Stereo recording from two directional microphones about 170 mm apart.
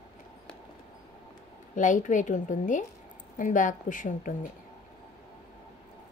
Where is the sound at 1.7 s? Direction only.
50° left (ahead or behind).